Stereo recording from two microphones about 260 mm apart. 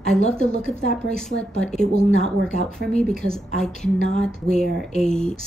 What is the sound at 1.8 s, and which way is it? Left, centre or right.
Speech, left.